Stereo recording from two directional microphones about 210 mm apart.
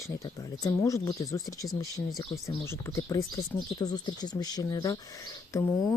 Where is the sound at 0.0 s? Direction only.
15° left (ahead or behind).